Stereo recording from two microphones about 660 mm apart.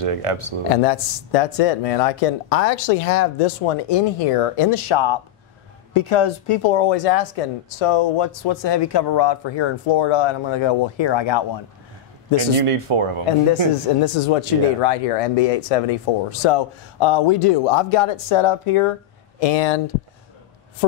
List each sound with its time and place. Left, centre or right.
0.0 s speech: right
0.8 s speech: left
12.4 s speech: right
14.0 s speech: left
19.4 s speech: left